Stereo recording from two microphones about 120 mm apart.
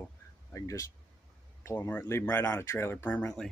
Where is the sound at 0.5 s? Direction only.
25° left (ahead or behind).